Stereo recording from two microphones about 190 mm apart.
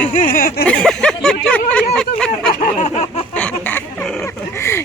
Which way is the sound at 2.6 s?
35° left (ahead or behind).